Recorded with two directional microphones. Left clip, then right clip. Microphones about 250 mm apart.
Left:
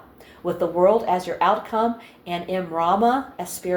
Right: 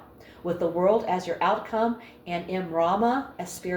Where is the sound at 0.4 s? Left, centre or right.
Left.